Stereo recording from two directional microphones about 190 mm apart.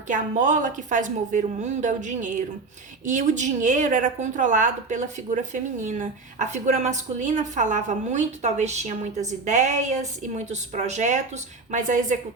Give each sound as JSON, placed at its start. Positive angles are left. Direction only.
{"t": 0.1, "sound": "a woman's voice", "side_deg": -40}